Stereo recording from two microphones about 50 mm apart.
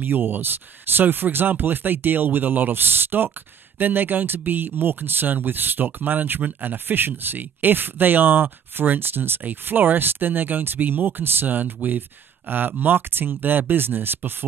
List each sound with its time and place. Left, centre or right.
0.0 s speech: right